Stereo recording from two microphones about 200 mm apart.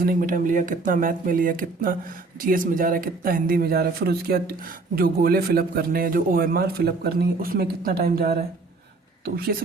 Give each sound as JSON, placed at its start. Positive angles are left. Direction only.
{"t": 0.0, "sound": "speech", "side_deg": -45}